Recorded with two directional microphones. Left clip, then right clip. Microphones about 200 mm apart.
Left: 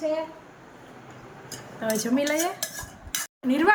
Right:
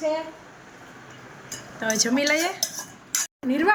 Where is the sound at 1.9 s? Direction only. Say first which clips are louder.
Right 3 dB; centre (ahead or behind).